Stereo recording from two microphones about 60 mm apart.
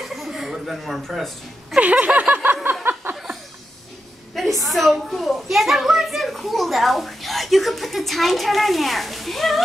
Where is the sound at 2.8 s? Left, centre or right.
Right.